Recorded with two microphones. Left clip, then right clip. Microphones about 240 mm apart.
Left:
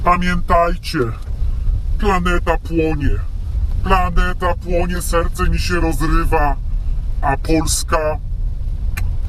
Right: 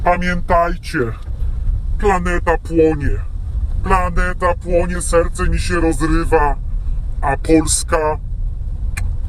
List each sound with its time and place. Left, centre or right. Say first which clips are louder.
0.0 s speech: even; centre
0.4 s speech: even; centre
0.7 s speech: even; centre
2.0 s speech: right 1 dB; centre